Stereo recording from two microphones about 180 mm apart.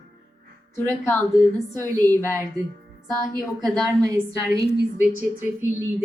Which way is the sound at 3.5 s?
Centre (ahead or behind).